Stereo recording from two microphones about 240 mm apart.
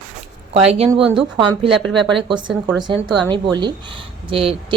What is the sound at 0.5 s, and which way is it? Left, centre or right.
Speech, right.